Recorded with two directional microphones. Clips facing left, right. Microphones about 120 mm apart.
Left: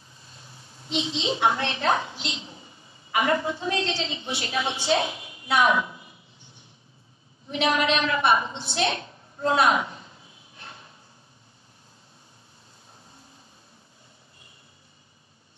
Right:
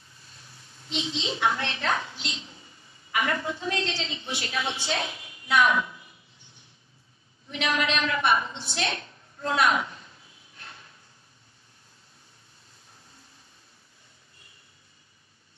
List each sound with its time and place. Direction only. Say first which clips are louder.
0.3 s a woman's voice: left 4 dB; 25° left (ahead or behind)
7.4 s a woman's voice: left 4 dB; 30° left (ahead or behind)
10.6 s drawer open or close: left 3 dB; 25° left (ahead or behind)